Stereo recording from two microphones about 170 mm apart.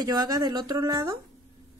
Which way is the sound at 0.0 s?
25° right (ahead or behind).